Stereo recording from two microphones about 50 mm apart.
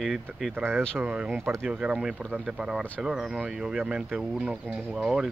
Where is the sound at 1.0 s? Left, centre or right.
Right; by 3.4 s centre.